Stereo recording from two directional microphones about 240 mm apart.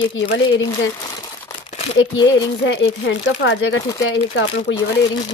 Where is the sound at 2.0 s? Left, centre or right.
Centre.